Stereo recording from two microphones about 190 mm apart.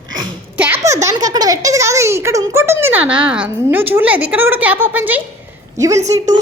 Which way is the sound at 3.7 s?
10° right (ahead or behind).